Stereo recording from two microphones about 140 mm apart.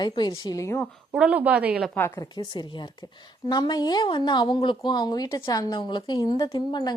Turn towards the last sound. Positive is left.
turn(degrees=30)  # may be behind; listen again after turning